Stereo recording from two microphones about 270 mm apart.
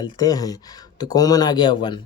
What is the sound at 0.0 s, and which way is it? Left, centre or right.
Speech, centre.